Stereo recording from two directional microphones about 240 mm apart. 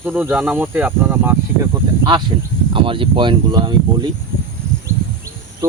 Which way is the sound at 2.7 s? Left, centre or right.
Right.